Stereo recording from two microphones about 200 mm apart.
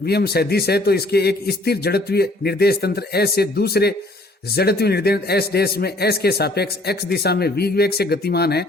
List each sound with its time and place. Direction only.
0.0 s a man's voice: 50° left (ahead or behind)